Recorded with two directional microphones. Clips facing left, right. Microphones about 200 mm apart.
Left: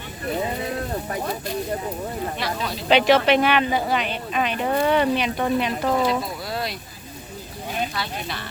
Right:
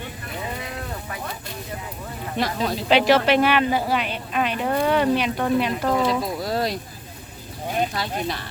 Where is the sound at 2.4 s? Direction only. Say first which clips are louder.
Right 9 dB; 45° right (ahead or behind).